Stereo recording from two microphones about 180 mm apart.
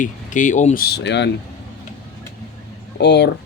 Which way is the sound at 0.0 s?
45° left (ahead or behind).